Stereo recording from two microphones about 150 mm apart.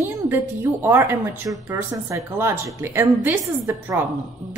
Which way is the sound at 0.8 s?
15° right (ahead or behind).